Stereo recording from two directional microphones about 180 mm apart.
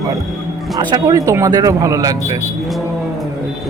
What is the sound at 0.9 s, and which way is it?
Speech, 20° right (ahead or behind).